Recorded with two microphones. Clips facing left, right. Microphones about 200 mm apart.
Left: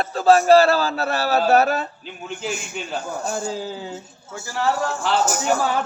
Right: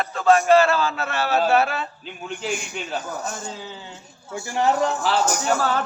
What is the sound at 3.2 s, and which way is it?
Speech, 30° left (ahead or behind).